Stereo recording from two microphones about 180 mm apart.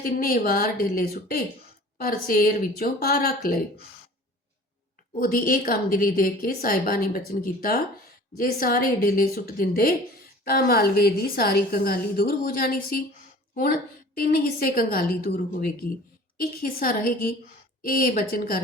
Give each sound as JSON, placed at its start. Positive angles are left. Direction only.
{"t": 0.0, "sound": "speech", "side_deg": 55}
{"t": 5.2, "sound": "a woman's voice", "side_deg": 50}